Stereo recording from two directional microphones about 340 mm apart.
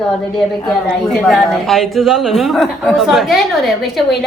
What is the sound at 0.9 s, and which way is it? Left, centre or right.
A woman's voice, centre.